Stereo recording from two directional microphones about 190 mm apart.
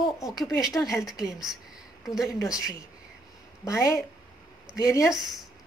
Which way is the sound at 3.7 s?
15° left (ahead or behind).